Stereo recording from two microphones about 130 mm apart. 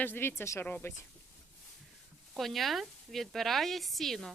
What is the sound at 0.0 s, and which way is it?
Speech, 15° left (ahead or behind).